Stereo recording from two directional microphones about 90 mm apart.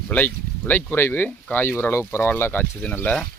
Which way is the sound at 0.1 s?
20° left (ahead or behind).